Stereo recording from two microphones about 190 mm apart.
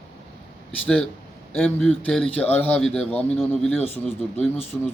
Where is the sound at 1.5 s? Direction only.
5° left (ahead or behind).